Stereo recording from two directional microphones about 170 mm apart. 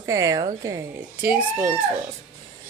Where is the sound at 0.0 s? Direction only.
20° right (ahead or behind).